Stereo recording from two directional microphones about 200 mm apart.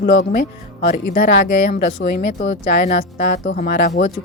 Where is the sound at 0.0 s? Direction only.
55° left (ahead or behind).